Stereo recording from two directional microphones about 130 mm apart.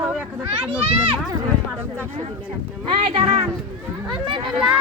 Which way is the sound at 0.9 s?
40° right (ahead or behind).